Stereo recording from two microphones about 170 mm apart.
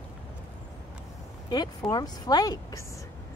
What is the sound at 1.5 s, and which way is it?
Speech, 25° left (ahead or behind).